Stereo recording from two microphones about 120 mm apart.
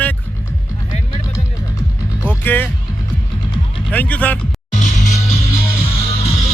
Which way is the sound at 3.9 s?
10° left (ahead or behind).